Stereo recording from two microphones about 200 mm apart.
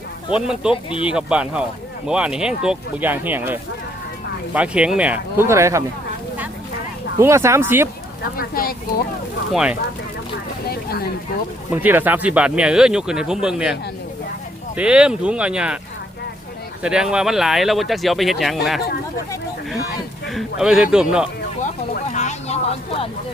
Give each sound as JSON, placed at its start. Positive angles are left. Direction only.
{"t": 0.3, "sound": "speech", "side_deg": -5}
{"t": 0.7, "sound": "speech", "side_deg": 25}
{"t": 1.0, "sound": "speech", "side_deg": -5}
{"t": 7.2, "sound": "speech", "side_deg": -15}
{"t": 8.2, "sound": "speech", "side_deg": 45}
{"t": 9.5, "sound": "speech", "side_deg": -5}
{"t": 10.7, "sound": "a sound", "side_deg": 50}
{"t": 11.7, "sound": "speech", "side_deg": -10}
{"t": 14.8, "sound": "speech", "side_deg": -5}
{"t": 16.8, "sound": "speech", "side_deg": -5}
{"t": 20.2, "sound": "speech", "side_deg": 0}
{"t": 22.1, "sound": "speech", "side_deg": 35}